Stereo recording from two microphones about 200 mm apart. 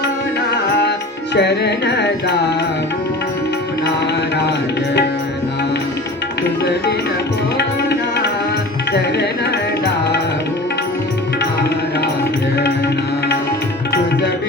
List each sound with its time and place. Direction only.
0.8 s music: 60° left (ahead or behind)
6.4 s music: 55° left (ahead or behind)